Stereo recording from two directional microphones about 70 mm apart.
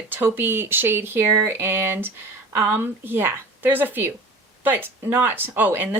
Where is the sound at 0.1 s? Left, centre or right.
Right.